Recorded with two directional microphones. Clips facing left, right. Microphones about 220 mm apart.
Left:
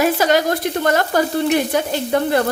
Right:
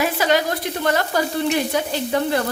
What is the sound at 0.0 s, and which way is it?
A woman's voice, 45° left (ahead or behind).